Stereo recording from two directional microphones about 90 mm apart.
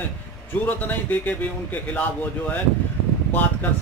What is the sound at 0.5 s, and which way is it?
A man's voice, 25° left (ahead or behind).